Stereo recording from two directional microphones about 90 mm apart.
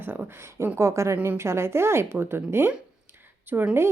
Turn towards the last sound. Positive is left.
turn(degrees=-25)  # may be behind; listen again after turning